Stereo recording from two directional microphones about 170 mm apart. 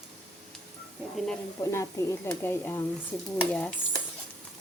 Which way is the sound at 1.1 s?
5° left (ahead or behind).